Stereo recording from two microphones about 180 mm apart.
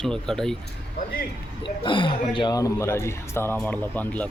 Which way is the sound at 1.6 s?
25° left (ahead or behind).